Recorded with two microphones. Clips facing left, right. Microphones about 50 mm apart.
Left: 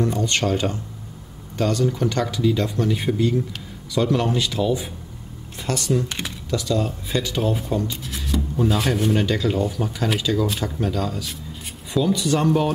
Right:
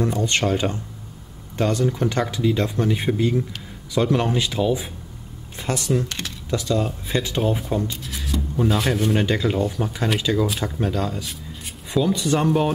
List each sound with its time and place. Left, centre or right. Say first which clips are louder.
0.2 s speech: right 1 dB; centre
6.0 s speech: left 1 dB; centre
6.5 s speech: even; centre
7.9 s speech: left 2 dB; centre
9.1 s speech: even; centre
9.6 s speech: even; centre